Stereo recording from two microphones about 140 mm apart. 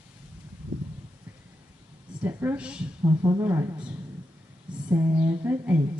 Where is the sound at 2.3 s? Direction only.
15° right (ahead or behind).